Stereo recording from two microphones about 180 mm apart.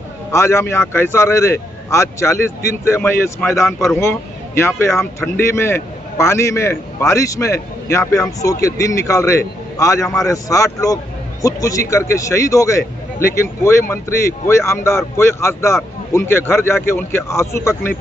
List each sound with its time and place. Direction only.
0.3 s a man's voice: 15° left (ahead or behind)